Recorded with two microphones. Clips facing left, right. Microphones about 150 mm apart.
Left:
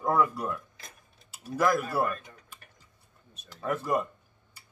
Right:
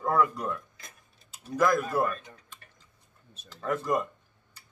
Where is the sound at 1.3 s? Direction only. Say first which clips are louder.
Right 1 dB; 5° left (ahead or behind).